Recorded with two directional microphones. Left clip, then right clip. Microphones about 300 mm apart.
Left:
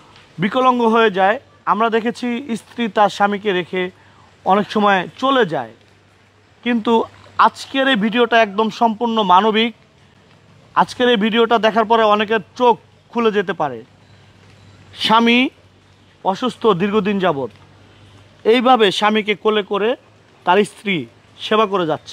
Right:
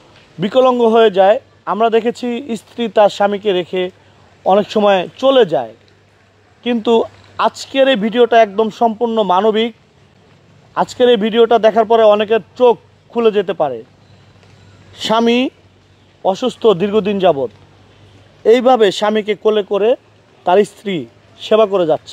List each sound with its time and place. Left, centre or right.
0.8 s a man's voice: left
6.7 s a man's voice: left
14.9 s a man's voice: left
16.5 s a man's voice: left